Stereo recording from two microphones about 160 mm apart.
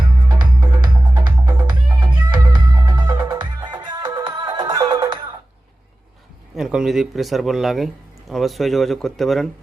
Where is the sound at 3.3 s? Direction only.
25° right (ahead or behind).